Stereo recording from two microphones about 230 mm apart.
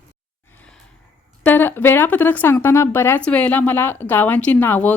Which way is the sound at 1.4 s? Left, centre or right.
Centre.